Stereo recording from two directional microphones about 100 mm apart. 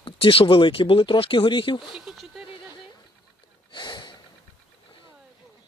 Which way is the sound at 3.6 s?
50° left (ahead or behind).